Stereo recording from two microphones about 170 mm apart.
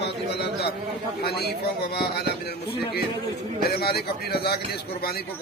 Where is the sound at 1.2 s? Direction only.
70° left (ahead or behind).